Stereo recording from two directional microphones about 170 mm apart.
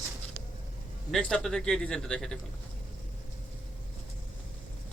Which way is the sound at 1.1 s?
5° left (ahead or behind).